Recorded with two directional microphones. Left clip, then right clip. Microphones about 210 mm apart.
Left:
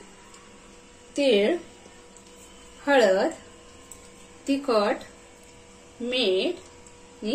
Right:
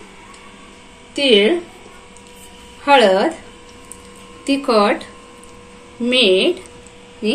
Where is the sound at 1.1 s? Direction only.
25° left (ahead or behind).